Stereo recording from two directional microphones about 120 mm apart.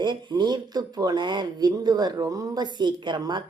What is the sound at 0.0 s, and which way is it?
Speech, 40° right (ahead or behind).